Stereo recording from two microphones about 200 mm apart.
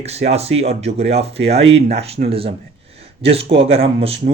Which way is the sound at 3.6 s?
30° right (ahead or behind).